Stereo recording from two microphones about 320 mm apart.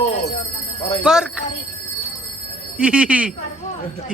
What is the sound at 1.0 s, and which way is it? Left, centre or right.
Speech, centre.